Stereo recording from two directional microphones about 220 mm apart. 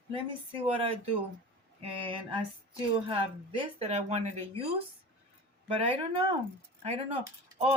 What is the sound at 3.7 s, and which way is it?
Speech, 30° right (ahead or behind).